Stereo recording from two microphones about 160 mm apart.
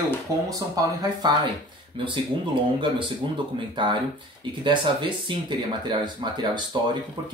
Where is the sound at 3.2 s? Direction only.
30° right (ahead or behind).